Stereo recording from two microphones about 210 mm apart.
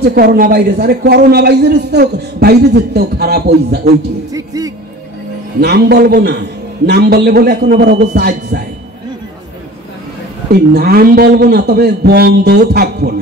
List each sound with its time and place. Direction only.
0.0 s a man's voice: 45° right (ahead or behind)
4.3 s speech: 15° right (ahead or behind)
5.6 s a man's voice: 50° right (ahead or behind)
10.5 s a man's voice: 50° right (ahead or behind)